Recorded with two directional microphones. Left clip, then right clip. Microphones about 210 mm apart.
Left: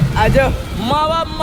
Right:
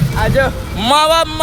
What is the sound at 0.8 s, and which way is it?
Speech, 40° right (ahead or behind).